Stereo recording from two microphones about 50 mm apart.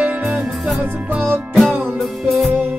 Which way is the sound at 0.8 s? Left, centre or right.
Right.